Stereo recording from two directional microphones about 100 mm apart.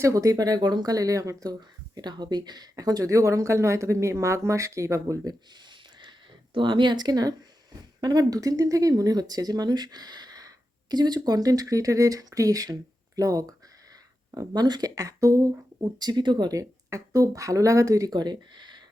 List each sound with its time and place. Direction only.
0.0 s speech: 35° right (ahead or behind)
6.0 s a sound: 55° right (ahead or behind)
8.0 s speech: 40° right (ahead or behind)
16.6 s speech: 35° right (ahead or behind)